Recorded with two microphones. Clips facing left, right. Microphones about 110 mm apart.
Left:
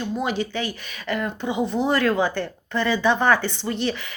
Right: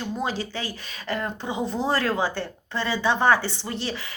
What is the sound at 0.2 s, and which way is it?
A woman's voice, 35° right (ahead or behind).